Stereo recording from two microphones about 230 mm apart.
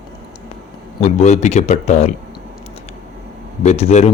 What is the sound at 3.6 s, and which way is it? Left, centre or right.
Speech, left.